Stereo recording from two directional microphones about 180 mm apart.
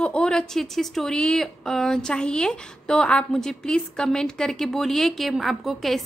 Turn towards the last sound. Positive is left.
turn(degrees=0)  # may be behind; listen again after turning